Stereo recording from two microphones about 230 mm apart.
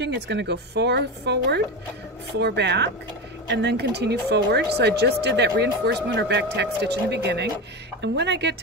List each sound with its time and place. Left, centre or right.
0.0 s speech: right